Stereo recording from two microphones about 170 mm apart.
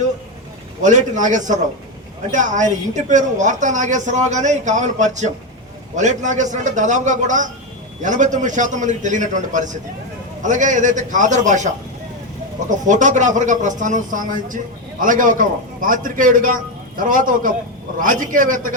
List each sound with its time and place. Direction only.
0.8 s a woman's voice: 45° right (ahead or behind)
12.8 s a woman's voice: 45° right (ahead or behind)